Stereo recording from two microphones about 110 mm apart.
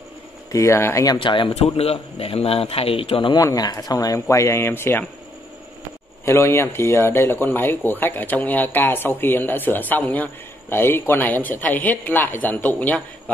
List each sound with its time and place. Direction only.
0.5 s speech: 25° left (ahead or behind)
1.2 s speech: 50° left (ahead or behind)
1.5 s a man's voice: 70° left (ahead or behind); by 3.3 s 55° left (ahead or behind)
3.3 s speech: 35° left (ahead or behind)
6.2 s speech: 25° left (ahead or behind)